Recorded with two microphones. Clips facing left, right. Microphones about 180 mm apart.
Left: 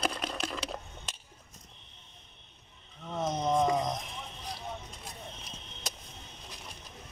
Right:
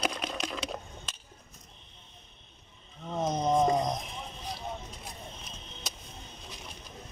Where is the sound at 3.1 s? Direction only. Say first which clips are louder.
Right 2 dB; 20° right (ahead or behind).